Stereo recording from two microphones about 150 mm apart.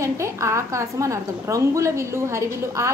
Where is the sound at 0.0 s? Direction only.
20° right (ahead or behind).